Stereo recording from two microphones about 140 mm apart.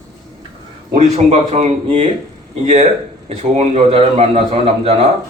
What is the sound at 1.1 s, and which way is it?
Speech, 50° right (ahead or behind).